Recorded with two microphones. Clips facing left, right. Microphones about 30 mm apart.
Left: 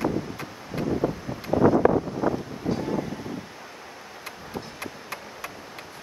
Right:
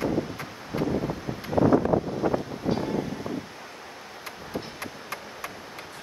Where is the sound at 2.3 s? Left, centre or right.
Right.